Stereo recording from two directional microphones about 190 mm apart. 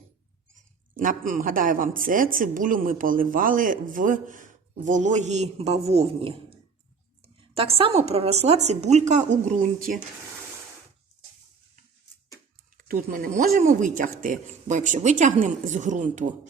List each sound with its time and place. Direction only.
0.9 s a woman's voice: 45° right (ahead or behind)
12.7 s speech: 45° right (ahead or behind)